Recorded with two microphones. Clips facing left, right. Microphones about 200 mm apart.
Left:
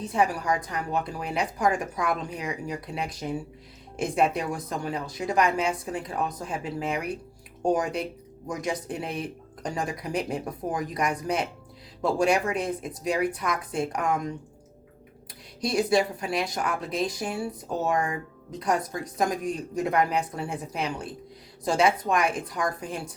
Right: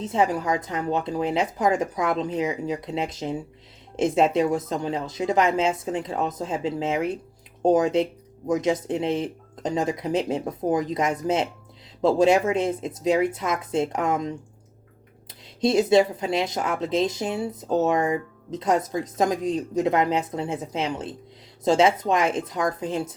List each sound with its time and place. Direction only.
0.0 s speech: 20° right (ahead or behind)
15.6 s speech: 25° right (ahead or behind)